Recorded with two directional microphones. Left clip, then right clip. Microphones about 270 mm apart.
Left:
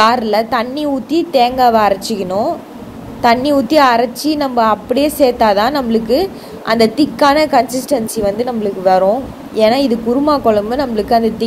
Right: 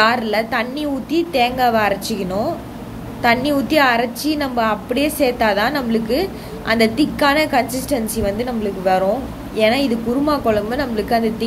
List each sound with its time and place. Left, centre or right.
0.0 s a woman's voice: left